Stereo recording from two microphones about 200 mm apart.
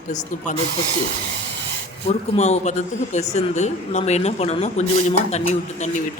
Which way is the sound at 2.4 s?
35° left (ahead or behind).